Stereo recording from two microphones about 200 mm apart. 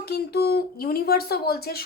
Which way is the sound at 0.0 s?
55° left (ahead or behind).